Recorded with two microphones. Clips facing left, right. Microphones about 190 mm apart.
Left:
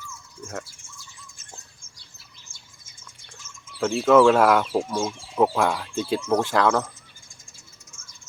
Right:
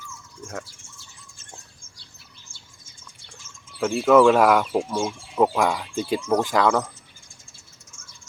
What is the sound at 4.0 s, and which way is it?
Speech, centre (ahead or behind).